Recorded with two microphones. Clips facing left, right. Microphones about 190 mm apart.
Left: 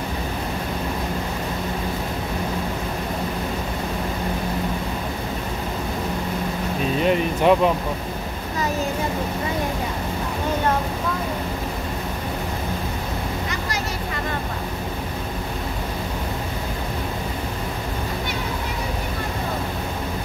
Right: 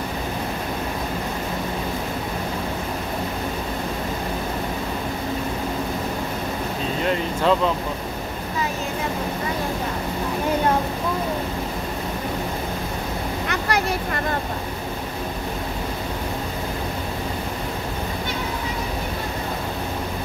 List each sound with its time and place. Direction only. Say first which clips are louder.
7.0 s speech: left 3 dB; 20° left (ahead or behind)
13.5 s vehicle: right 4 dB; 60° right (ahead or behind)